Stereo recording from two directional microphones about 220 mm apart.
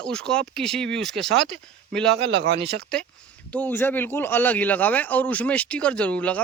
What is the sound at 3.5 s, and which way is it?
A man's voice, 10° left (ahead or behind).